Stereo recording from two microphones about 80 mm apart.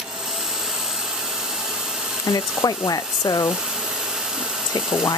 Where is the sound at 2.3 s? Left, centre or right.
Left.